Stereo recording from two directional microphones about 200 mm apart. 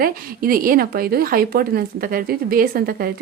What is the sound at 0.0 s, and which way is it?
A woman's voice, 45° right (ahead or behind).